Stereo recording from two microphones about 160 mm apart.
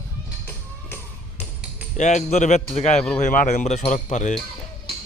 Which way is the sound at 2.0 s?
50° left (ahead or behind).